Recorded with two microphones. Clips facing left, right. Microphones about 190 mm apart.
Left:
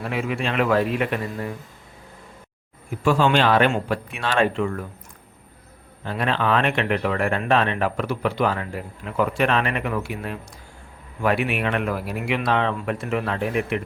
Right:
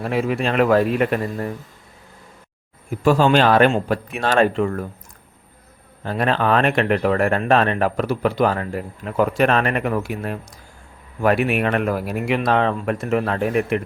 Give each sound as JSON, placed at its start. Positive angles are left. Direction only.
{"t": 0.0, "sound": "speech", "side_deg": -40}
{"t": 3.0, "sound": "speech", "side_deg": -40}
{"t": 6.1, "sound": "speech", "side_deg": -45}